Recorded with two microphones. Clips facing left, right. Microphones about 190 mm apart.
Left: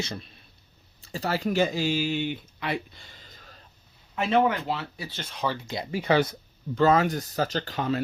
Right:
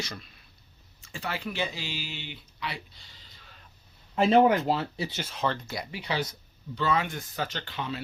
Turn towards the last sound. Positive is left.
turn(degrees=45)  # may be behind; listen again after turning